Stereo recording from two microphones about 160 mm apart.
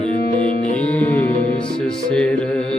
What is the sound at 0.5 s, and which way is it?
Music, 55° left (ahead or behind).